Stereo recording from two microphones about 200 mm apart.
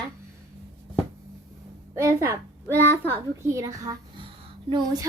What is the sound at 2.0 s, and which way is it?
Speech, 15° right (ahead or behind).